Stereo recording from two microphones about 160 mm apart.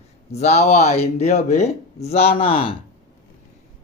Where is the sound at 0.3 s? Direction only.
40° left (ahead or behind).